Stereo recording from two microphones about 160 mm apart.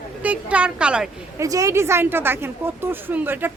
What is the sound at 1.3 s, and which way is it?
A woman's voice, 20° right (ahead or behind).